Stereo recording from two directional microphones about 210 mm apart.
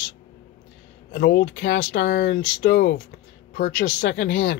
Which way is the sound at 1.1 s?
55° left (ahead or behind).